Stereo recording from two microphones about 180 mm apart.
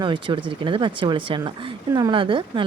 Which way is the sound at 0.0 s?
25° right (ahead or behind).